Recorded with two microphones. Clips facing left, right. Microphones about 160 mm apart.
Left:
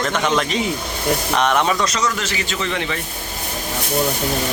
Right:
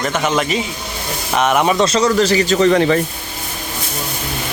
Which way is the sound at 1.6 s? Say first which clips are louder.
Right 6 dB; 30° right (ahead or behind).